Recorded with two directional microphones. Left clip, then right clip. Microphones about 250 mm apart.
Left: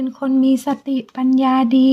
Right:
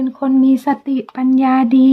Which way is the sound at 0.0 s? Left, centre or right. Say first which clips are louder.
Right 3 dB; left.